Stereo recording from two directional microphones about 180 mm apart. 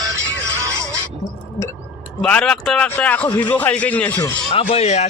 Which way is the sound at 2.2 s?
5° left (ahead or behind).